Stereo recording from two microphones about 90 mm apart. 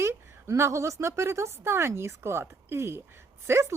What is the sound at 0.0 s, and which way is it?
A woman's voice, 30° right (ahead or behind).